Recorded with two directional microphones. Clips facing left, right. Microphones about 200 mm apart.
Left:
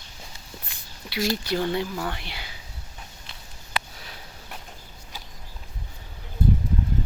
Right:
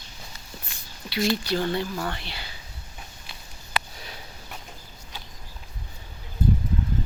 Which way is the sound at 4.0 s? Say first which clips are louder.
Right 2 dB; centre (ahead or behind).